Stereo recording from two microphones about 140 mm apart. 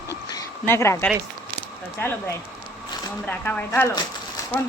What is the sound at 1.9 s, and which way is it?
Speech, 20° left (ahead or behind).